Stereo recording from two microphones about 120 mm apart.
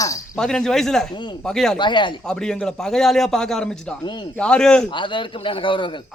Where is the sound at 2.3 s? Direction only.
5° left (ahead or behind).